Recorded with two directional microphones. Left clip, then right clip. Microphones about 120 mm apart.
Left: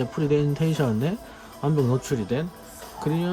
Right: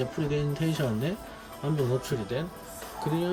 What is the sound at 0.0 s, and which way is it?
Speech, 25° left (ahead or behind).